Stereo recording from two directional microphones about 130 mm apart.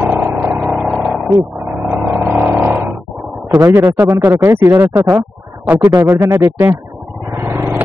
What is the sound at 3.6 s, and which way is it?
Speech, 15° right (ahead or behind).